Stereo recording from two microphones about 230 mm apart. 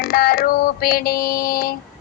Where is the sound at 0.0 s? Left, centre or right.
Left.